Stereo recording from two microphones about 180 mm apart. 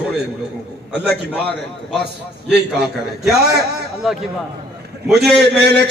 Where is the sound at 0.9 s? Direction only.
65° right (ahead or behind).